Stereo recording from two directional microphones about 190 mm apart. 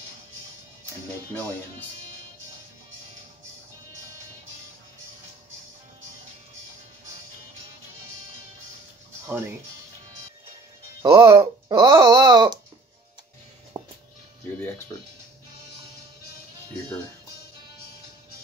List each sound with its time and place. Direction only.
11.0 s speech: 20° right (ahead or behind)
13.7 s music: 25° right (ahead or behind)